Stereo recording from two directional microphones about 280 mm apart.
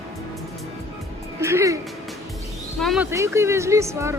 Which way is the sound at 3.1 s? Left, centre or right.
Centre.